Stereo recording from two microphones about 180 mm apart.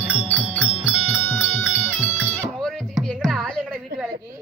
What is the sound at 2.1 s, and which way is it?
Music, 10° left (ahead or behind).